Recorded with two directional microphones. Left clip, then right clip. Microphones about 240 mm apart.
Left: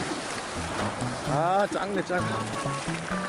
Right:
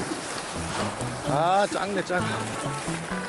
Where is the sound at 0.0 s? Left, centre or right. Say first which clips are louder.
Even; centre.